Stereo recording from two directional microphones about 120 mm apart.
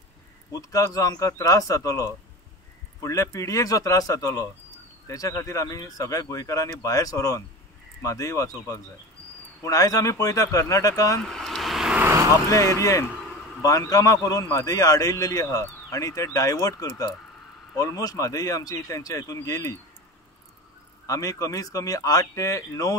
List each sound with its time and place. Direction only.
0.5 s a man's voice: 30° left (ahead or behind)
11.2 s vehicle: 5° left (ahead or behind)
12.0 s vehicle: 25° right (ahead or behind)
12.4 s a man's voice: 25° left (ahead or behind)
21.1 s a man's voice: 30° left (ahead or behind)